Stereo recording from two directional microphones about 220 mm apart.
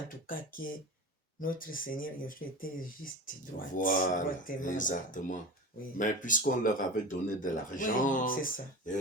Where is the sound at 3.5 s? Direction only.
40° left (ahead or behind).